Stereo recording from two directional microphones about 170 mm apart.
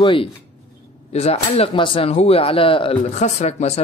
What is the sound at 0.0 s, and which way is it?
Speech, 30° left (ahead or behind).